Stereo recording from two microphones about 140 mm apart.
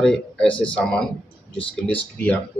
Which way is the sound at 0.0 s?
5° left (ahead or behind).